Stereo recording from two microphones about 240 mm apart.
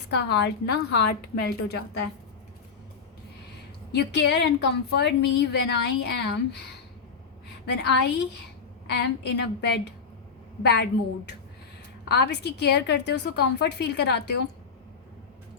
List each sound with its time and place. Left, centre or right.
0.1 s a woman's voice: left
3.9 s a woman's voice: left
12.0 s a woman's voice: left